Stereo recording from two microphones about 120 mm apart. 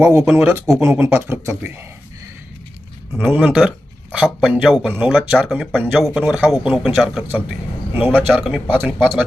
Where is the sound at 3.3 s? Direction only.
10° right (ahead or behind).